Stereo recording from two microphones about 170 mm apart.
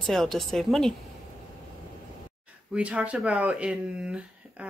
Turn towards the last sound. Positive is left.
turn(degrees=-5)  # may be behind; listen again after turning